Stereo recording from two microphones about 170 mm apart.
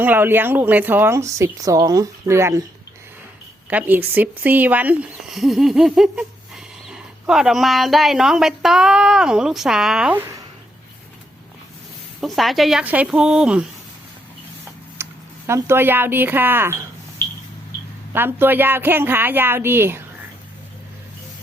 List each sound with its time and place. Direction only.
0.0 s a woman's voice: 10° right (ahead or behind)
3.7 s a woman's voice: 10° right (ahead or behind)
12.2 s speech: centre (ahead or behind)
15.0 s a sound: 15° right (ahead or behind)
15.4 s a woman's voice: 15° right (ahead or behind)
18.1 s a woman's voice: 15° right (ahead or behind)